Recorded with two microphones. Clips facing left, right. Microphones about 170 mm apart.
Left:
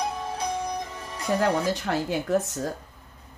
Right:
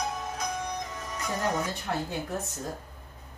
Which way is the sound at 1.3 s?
85° left.